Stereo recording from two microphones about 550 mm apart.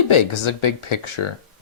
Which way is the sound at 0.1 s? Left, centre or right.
Left.